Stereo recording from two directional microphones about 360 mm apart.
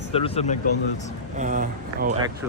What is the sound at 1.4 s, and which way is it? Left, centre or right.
Speech, right.